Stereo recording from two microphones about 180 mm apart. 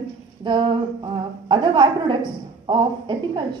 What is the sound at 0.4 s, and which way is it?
A woman's voice, 25° right (ahead or behind).